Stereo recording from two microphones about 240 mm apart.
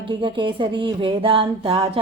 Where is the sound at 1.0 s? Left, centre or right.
Right.